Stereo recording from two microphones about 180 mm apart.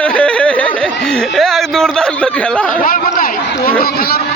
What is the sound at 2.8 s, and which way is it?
Speech, 50° left (ahead or behind).